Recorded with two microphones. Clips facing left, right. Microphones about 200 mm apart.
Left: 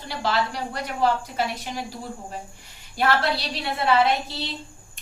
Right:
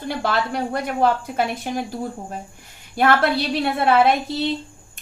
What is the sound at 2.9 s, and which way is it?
A woman's voice, 55° right (ahead or behind).